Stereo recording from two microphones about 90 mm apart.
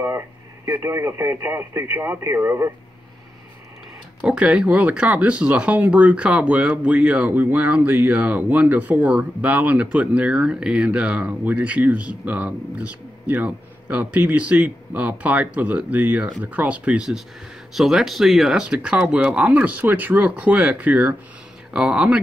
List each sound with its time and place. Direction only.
0.7 s speech: 30° right (ahead or behind)
4.2 s speech: 10° right (ahead or behind)